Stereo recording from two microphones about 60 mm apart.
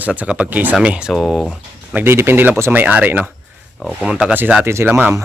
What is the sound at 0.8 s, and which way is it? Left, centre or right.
Speech, centre.